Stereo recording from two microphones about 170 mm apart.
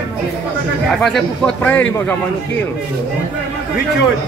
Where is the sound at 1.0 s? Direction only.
5° left (ahead or behind).